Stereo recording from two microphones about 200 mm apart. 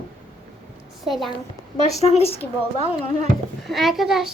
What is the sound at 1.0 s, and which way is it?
Child singing, centre (ahead or behind).